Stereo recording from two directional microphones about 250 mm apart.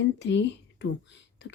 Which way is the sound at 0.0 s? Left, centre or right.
Left.